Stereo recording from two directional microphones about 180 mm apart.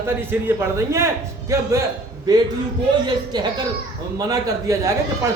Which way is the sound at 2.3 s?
20° right (ahead or behind).